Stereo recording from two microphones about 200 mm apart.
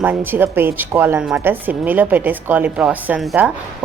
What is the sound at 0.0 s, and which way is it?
A woman's voice, 10° right (ahead or behind).